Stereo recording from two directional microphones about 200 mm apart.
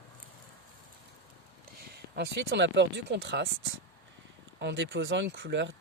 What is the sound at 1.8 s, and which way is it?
Speech, 55° right (ahead or behind).